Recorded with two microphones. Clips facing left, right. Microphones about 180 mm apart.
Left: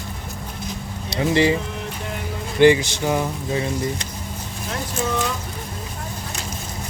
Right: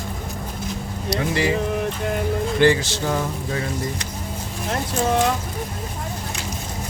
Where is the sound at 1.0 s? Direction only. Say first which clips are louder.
Left 3 dB; 25° left (ahead or behind).